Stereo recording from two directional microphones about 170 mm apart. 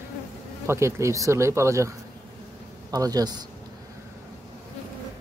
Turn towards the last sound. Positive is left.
turn(degrees=-20)  # may be behind; listen again after turning